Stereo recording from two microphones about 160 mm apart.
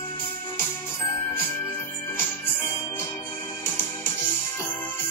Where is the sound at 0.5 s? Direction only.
15° left (ahead or behind).